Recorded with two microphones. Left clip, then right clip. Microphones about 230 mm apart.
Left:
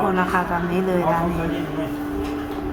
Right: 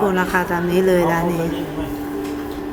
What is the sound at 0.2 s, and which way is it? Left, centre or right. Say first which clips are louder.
Music: right 2 dB; centre.